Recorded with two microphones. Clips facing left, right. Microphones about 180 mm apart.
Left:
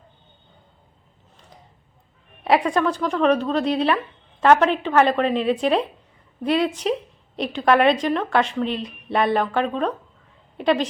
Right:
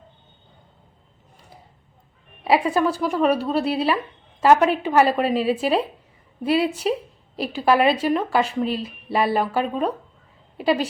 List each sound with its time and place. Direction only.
2.6 s a woman's voice: 10° right (ahead or behind)